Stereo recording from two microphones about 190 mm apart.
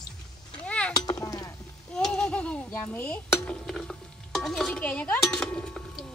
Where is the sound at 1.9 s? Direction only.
5° left (ahead or behind).